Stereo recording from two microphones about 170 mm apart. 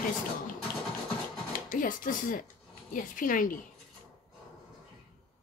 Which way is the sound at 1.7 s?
50° left (ahead or behind).